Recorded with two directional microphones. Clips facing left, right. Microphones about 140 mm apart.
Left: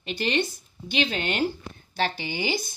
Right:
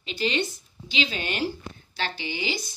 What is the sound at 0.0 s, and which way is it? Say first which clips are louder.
Speech: left 1 dB; 55° left (ahead or behind).